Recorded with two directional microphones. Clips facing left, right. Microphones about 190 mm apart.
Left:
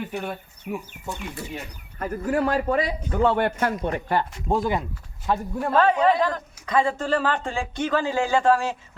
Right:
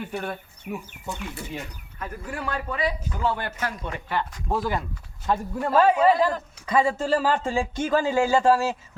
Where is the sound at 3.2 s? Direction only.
60° left (ahead or behind).